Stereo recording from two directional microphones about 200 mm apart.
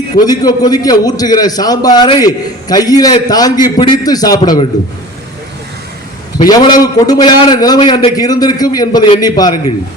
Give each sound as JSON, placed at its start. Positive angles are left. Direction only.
{"t": 0.3, "sound": "a man's voice", "side_deg": 20}
{"t": 6.4, "sound": "a man's voice", "side_deg": 20}